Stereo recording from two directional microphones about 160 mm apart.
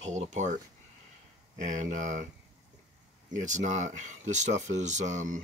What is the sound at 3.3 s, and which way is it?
Speech, 50° right (ahead or behind).